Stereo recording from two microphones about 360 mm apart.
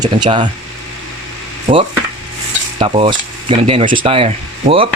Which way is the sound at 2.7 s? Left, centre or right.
Centre.